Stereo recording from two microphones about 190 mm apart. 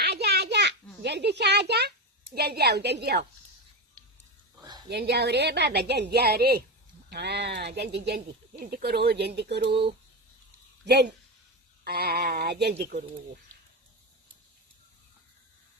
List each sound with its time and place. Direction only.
0.0 s a sound: 60° right (ahead or behind)
2.3 s a woman's voice: 55° right (ahead or behind)
4.9 s a woman's voice: 60° right (ahead or behind)
10.8 s a woman's voice: 60° right (ahead or behind)